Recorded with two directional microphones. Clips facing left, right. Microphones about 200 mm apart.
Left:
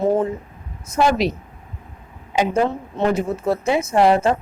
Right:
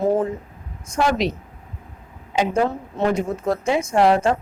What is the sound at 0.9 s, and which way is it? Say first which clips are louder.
Speech: left 3 dB; 5° left (ahead or behind).